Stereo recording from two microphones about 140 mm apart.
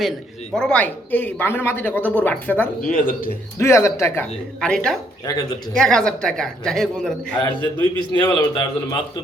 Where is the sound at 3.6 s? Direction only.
20° left (ahead or behind).